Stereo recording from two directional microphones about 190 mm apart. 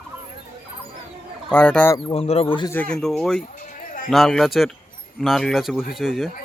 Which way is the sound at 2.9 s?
Centre (ahead or behind).